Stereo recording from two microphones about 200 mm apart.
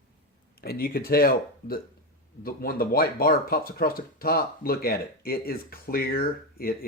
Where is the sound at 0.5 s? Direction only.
50° left (ahead or behind).